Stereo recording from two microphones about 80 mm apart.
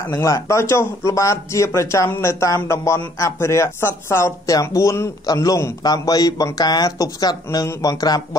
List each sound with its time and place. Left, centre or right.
0.1 s speech: left
5.2 s speech: left